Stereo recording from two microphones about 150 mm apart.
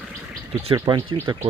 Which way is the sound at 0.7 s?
25° right (ahead or behind).